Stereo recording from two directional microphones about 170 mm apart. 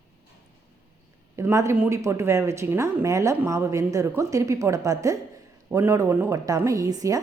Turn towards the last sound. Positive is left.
turn(degrees=-20)  # may be behind; listen again after turning